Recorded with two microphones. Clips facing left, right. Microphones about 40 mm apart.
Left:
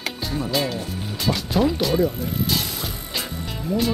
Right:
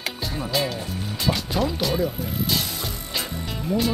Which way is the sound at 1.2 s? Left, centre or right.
Centre.